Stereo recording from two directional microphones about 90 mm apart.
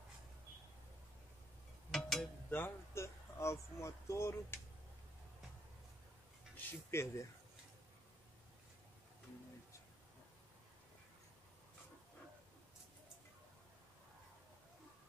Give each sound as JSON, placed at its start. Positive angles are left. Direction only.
{"t": 1.9, "sound": "a sound", "side_deg": 5}
{"t": 2.5, "sound": "speech", "side_deg": 25}
{"t": 6.5, "sound": "speech", "side_deg": 30}